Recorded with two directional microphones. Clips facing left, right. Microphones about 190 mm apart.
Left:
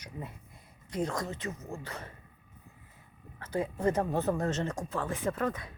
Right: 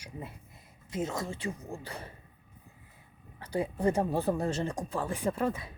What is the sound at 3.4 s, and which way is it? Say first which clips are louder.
Speech: right 1 dB; 15° right (ahead or behind).